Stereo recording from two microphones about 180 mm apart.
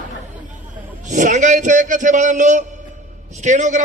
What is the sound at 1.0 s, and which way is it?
A man's voice, 45° right (ahead or behind).